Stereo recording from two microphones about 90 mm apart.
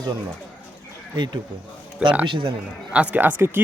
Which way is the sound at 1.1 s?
55° right (ahead or behind).